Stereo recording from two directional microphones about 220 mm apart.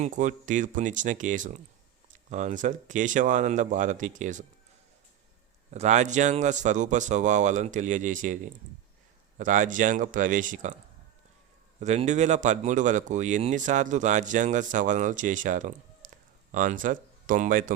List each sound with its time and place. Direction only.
0.0 s speech: 35° right (ahead or behind)
5.7 s speech: 30° right (ahead or behind)
9.4 s speech: 35° right (ahead or behind)
11.8 s speech: 30° right (ahead or behind)